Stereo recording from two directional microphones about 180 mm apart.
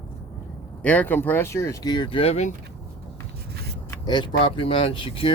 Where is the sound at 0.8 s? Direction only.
10° left (ahead or behind); by 2.5 s 35° left (ahead or behind).